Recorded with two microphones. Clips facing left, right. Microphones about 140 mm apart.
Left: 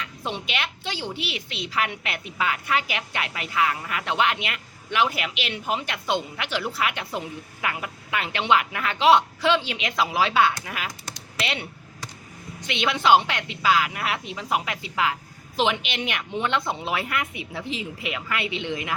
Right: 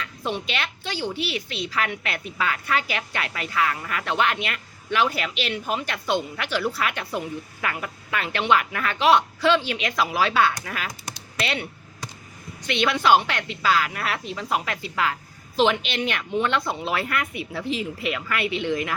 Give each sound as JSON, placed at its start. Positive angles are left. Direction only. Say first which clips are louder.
{"t": 0.0, "sound": "a woman's voice", "louder": "right 3 dB", "side_deg": 20}
{"t": 12.6, "sound": "a woman's voice", "louder": "right 1 dB", "side_deg": 20}